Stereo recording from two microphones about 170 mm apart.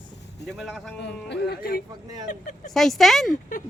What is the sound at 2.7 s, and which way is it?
Speech, centre (ahead or behind).